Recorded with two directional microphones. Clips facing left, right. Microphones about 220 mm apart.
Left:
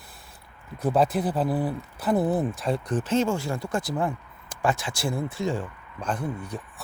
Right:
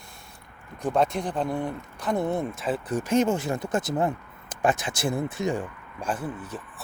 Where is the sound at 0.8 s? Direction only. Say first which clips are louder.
Left 2 dB; 5° left (ahead or behind).